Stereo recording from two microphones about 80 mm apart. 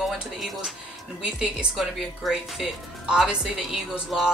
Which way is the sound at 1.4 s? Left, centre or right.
Centre.